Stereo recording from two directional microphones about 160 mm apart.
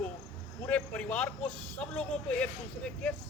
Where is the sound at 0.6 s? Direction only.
10° left (ahead or behind).